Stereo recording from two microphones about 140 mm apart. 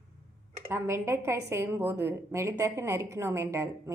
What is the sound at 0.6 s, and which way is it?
Speech, 20° right (ahead or behind).